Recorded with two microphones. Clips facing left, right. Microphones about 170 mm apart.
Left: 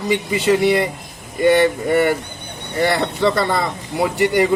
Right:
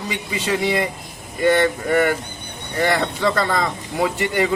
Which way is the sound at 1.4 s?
15° left (ahead or behind).